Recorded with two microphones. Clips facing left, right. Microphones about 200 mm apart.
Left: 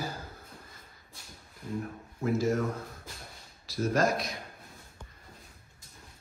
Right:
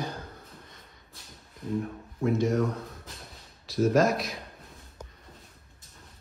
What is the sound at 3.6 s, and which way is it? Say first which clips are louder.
Speech: right 5 dB; centre (ahead or behind).